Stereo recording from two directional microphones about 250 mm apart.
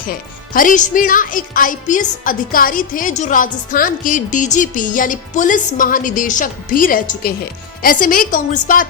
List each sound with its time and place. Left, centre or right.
0.5 s speech: left